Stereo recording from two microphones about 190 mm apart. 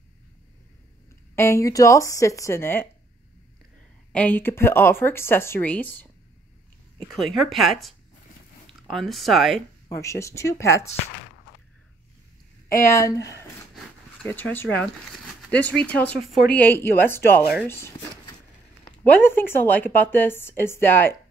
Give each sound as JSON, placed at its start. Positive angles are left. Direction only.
{"t": 1.3, "sound": "a woman's voice", "side_deg": 15}
{"t": 4.1, "sound": "a woman's voice", "side_deg": 10}
{"t": 9.8, "sound": "a woman's voice", "side_deg": 15}
{"t": 12.6, "sound": "a woman's voice", "side_deg": 15}